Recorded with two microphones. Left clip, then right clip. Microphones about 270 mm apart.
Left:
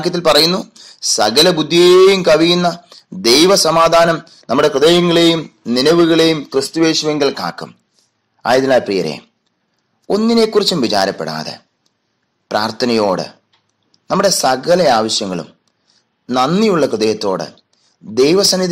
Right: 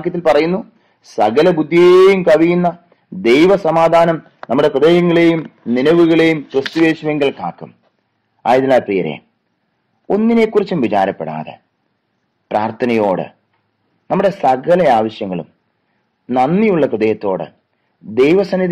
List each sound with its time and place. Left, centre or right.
0.0 s a man's voice: left